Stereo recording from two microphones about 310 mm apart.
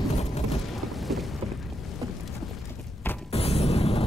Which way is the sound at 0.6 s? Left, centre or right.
Centre.